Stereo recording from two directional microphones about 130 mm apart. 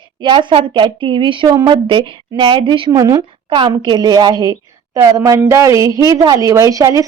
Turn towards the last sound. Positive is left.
turn(degrees=-25)  # may be behind; listen again after turning